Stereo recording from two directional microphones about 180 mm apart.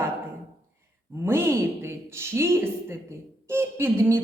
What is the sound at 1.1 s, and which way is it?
Speech, 15° right (ahead or behind).